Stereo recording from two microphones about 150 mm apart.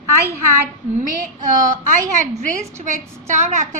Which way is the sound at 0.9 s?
65° right (ahead or behind).